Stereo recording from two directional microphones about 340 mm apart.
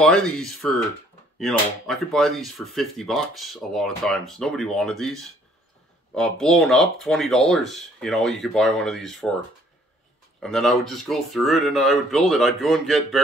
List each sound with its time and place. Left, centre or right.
0.0 s speech: centre
10.4 s speech: centre